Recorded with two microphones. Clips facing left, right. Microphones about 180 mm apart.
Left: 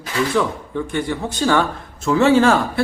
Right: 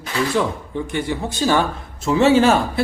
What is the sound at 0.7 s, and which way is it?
Speech, 20° right (ahead or behind).